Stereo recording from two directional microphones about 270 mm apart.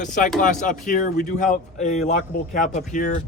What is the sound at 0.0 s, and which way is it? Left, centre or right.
A man's voice, left.